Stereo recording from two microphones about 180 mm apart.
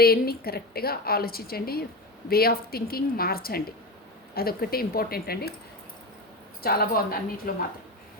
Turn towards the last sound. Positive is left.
turn(degrees=55)  # may be behind; listen again after turning